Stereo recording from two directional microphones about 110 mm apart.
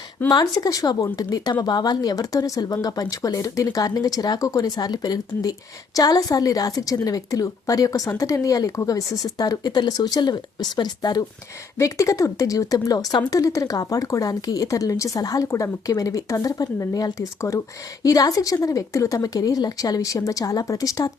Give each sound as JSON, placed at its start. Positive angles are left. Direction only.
{"t": 0.3, "sound": "speech", "side_deg": 35}
{"t": 11.8, "sound": "speech", "side_deg": 30}